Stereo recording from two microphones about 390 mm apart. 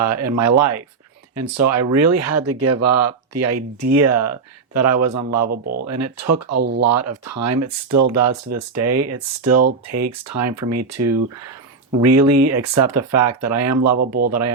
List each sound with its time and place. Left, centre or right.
0.0 s speech: right